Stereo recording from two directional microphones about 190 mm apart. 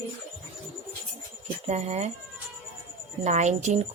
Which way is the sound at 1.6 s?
35° right (ahead or behind).